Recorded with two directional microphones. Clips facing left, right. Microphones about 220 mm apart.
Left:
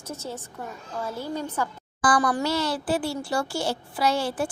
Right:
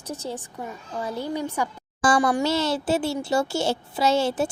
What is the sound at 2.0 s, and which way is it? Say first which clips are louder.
A child's voice: right 2 dB; 25° right (ahead or behind).